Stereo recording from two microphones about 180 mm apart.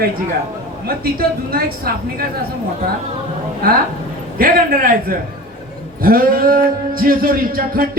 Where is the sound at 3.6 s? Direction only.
55° right (ahead or behind).